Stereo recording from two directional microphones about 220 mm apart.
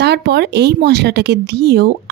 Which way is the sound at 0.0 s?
50° right (ahead or behind).